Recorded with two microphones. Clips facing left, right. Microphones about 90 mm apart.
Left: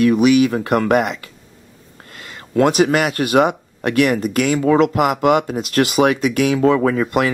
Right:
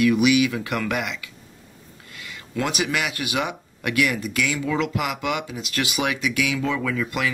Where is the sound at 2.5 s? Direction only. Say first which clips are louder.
Left 11 dB; 45° left (ahead or behind).